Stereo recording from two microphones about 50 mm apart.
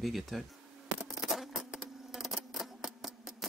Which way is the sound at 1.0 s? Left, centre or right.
Centre.